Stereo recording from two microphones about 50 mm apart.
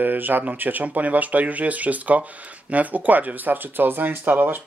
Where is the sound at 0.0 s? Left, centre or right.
Right.